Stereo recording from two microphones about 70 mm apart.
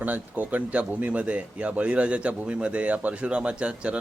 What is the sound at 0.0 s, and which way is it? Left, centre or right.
Speech, right.